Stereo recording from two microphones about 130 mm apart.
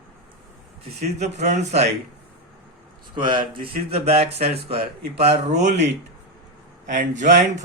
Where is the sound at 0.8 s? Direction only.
55° right (ahead or behind).